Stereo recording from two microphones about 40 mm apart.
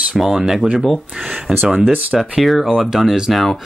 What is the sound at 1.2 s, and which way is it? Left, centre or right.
Speech, right.